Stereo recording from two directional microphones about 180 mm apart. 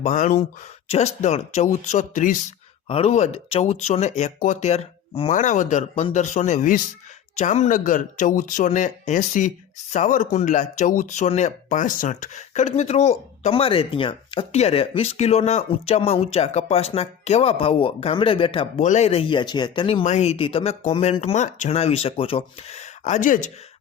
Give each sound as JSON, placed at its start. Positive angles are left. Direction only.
{"t": 0.0, "sound": "speech", "side_deg": 40}
{"t": 2.8, "sound": "speech", "side_deg": 30}
{"t": 18.8, "sound": "speech", "side_deg": 40}